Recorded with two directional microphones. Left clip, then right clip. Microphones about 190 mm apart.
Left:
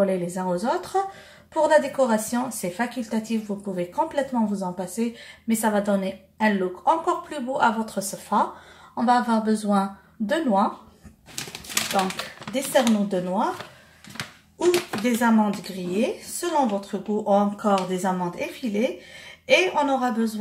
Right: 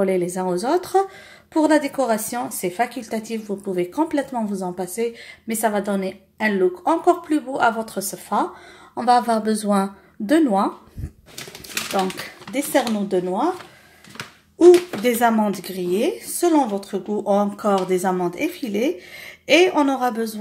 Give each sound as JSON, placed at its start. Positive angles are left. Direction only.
{"t": 0.0, "sound": "speech", "side_deg": -45}
{"t": 12.7, "sound": "speech", "side_deg": -40}
{"t": 15.0, "sound": "speech", "side_deg": -50}